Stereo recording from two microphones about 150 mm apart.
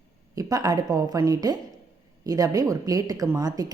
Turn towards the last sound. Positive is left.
turn(degrees=-25)  # may be behind; listen again after turning